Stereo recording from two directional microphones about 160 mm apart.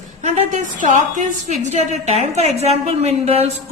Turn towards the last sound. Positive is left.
turn(degrees=-40)  # may be behind; listen again after turning